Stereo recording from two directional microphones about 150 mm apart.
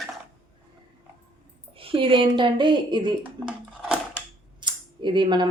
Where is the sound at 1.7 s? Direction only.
35° right (ahead or behind).